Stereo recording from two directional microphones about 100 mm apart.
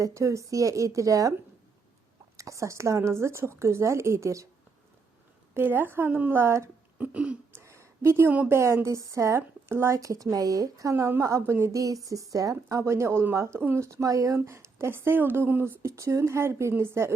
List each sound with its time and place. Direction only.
0.0 s a woman's voice: 30° right (ahead or behind)
2.3 s speech: 30° right (ahead or behind)
5.5 s speech: 20° right (ahead or behind)
7.1 s throat clearing: 10° right (ahead or behind)
7.5 s a sound: 30° right (ahead or behind)
8.3 s throat clearing: 15° right (ahead or behind)
8.5 s a woman's voice: 30° right (ahead or behind)
10.9 s speech: 25° right (ahead or behind)